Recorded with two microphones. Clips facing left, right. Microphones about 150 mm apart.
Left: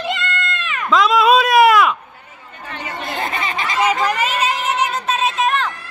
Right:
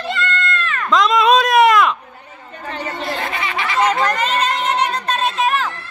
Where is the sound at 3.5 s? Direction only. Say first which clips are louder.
Even; 40° left (ahead or behind).